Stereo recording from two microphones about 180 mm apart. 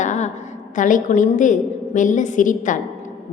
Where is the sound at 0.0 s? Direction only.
40° left (ahead or behind).